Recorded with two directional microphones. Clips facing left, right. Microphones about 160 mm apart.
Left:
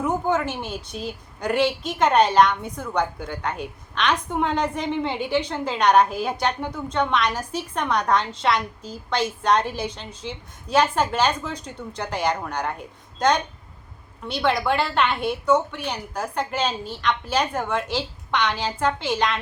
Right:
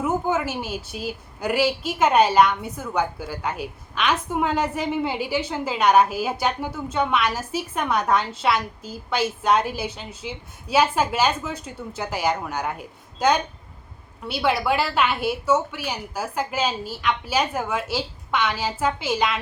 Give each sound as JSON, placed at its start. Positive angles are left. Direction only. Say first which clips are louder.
{"t": 0.0, "sound": "a woman's voice", "louder": "even", "side_deg": -5}